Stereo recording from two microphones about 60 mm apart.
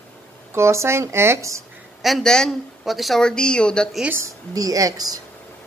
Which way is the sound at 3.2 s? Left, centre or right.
Centre.